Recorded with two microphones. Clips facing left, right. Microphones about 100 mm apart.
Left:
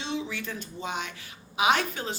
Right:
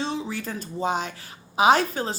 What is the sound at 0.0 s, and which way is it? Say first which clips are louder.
A woman's voice: right 4 dB; 40° right (ahead or behind).